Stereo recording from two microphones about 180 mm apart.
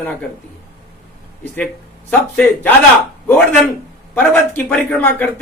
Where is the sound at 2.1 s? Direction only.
10° left (ahead or behind).